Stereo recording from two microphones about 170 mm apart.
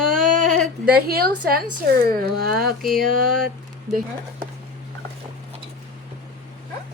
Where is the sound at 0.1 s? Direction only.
50° right (ahead or behind).